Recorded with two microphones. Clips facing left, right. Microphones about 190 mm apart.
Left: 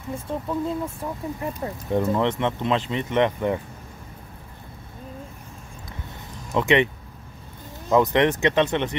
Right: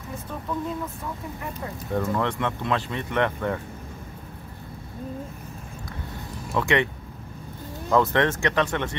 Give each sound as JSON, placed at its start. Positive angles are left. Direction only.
{"t": 0.3, "sound": "speech", "side_deg": 30}
{"t": 6.5, "sound": "speech", "side_deg": 20}
{"t": 7.9, "sound": "speech", "side_deg": 15}